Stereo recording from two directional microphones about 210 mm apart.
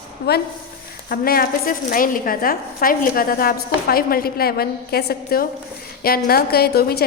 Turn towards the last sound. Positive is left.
turn(degrees=45)  # may be behind; listen again after turning